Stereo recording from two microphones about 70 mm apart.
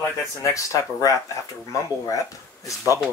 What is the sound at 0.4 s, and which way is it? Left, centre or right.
Speech, left.